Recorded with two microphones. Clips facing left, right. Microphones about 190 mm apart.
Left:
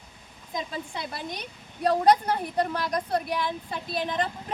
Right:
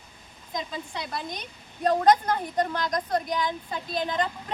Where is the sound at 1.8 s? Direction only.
10° left (ahead or behind).